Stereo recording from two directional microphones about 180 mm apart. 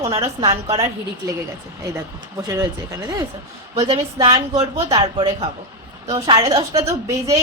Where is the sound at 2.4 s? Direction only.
20° right (ahead or behind).